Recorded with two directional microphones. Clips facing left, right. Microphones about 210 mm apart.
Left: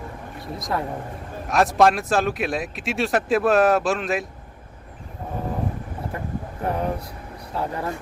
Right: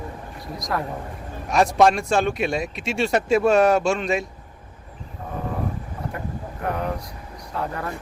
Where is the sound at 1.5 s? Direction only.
Centre (ahead or behind).